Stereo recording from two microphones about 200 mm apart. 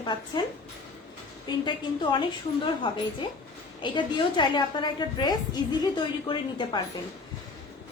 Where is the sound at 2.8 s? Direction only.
25° left (ahead or behind).